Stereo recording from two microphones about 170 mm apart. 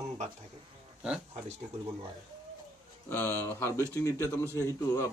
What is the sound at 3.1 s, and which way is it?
A man's voice, 10° left (ahead or behind).